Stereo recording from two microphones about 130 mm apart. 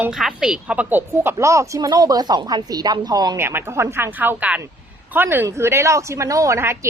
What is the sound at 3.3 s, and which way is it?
A woman's voice, 20° right (ahead or behind).